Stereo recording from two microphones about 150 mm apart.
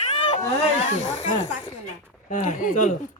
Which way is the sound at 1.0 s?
50° left (ahead or behind).